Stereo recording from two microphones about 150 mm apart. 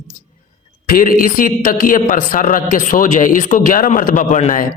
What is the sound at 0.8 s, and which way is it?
A man's voice, 65° left (ahead or behind).